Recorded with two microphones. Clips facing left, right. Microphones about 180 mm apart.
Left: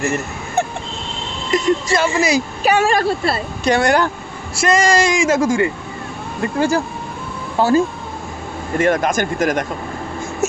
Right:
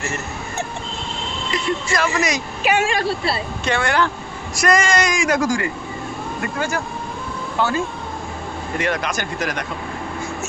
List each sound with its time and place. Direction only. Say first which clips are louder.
1.5 s speech: left 8 dB; 45° left (ahead or behind)
2.0 s a woman's voice: left 4 dB; 30° left (ahead or behind)
4.6 s a woman's voice: left 3 dB; 30° left (ahead or behind); by 9.7 s 50° left (ahead or behind)